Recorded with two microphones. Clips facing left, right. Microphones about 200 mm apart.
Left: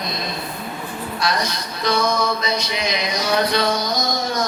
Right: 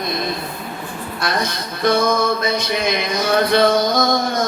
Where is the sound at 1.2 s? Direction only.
55° right (ahead or behind).